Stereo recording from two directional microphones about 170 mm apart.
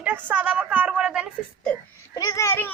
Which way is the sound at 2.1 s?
20° left (ahead or behind).